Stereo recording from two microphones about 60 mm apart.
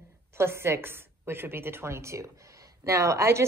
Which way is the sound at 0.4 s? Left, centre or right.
Right.